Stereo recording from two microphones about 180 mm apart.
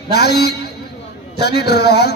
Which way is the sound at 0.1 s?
60° left (ahead or behind).